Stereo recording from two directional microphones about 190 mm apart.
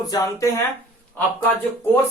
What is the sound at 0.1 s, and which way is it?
Speech, 20° left (ahead or behind).